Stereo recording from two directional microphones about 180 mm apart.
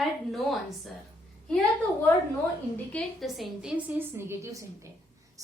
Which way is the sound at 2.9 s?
Centre (ahead or behind).